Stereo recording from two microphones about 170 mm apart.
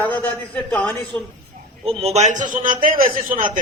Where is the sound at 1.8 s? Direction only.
35° right (ahead or behind); by 3.6 s 50° right (ahead or behind).